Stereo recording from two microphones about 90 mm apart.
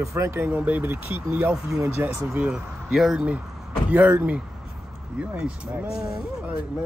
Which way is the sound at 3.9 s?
20° right (ahead or behind).